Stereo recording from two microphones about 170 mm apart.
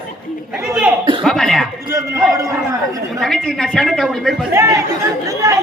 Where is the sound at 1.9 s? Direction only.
20° right (ahead or behind).